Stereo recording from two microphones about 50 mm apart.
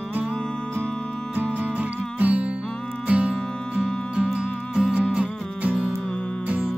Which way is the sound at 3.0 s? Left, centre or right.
Right.